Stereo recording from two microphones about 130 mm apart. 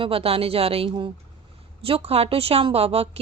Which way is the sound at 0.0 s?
45° right (ahead or behind).